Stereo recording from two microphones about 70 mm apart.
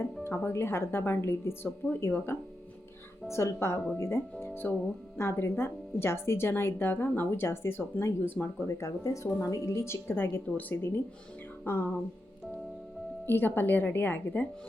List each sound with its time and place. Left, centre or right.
0.4 s a woman's voice: left
1.6 s speech: left
2.0 s a woman's voice: left
8.6 s a woman's voice: left
13.2 s speech: left